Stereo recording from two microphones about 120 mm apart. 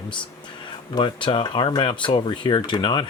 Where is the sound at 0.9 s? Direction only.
45° left (ahead or behind).